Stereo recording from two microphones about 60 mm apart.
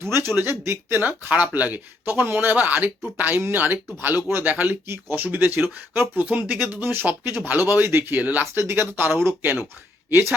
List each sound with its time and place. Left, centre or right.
0.0 s speech: right
1.3 s speech: right
3.3 s speech: right
6.2 s speech: right
8.2 s speech: right
8.7 s speech: right